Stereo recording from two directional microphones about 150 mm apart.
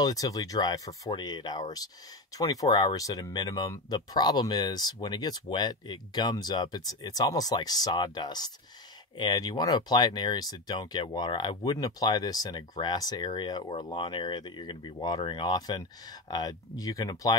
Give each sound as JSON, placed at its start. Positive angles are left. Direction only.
{"t": 0.0, "sound": "speech", "side_deg": 25}